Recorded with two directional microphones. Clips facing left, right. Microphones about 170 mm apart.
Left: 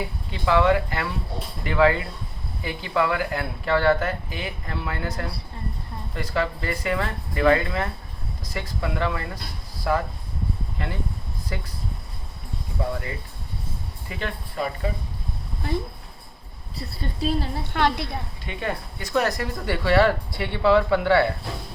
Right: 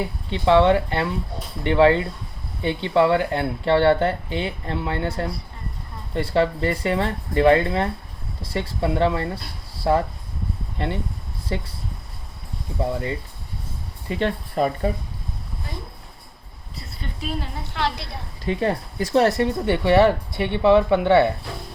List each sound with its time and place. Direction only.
0.0 s speech: 25° right (ahead or behind)
12.9 s speech: 25° right (ahead or behind)
17.2 s a woman's voice: 35° left (ahead or behind)
17.7 s a woman's voice: 55° left (ahead or behind)
18.4 s speech: 35° right (ahead or behind)